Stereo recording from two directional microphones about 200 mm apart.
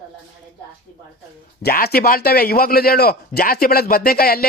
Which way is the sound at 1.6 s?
50° left (ahead or behind).